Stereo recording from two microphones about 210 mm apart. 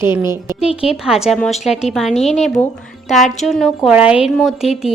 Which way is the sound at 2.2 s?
30° left (ahead or behind).